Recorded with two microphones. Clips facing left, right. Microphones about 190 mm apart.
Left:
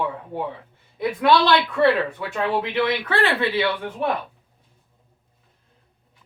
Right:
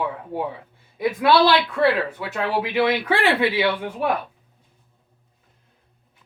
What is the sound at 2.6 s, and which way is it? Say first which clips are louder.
Speech: right 2 dB; 10° right (ahead or behind).